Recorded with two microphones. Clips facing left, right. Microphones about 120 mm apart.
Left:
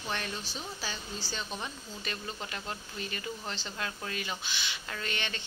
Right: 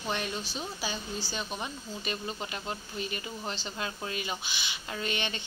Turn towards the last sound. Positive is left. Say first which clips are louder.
# right 3 dB
turn(degrees=-15)  # may be behind; listen again after turning